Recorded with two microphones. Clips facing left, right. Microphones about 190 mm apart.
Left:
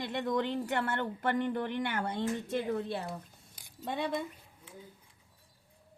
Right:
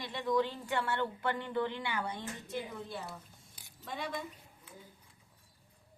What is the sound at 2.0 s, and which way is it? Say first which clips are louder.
A woman's voice: left 7 dB; 65° left (ahead or behind).